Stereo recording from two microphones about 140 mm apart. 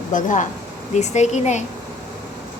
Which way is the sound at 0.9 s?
55° left (ahead or behind).